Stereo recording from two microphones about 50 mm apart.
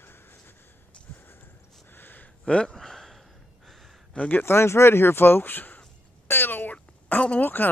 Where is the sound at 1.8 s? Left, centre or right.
Left.